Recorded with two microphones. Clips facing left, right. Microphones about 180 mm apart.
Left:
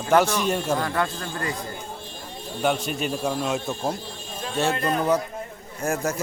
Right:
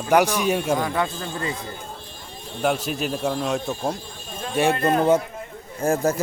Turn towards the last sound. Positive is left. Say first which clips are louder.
# right 5 dB
turn(degrees=-30)  # may be behind; listen again after turning